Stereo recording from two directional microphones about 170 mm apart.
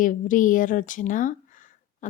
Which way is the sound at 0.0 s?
50° left (ahead or behind).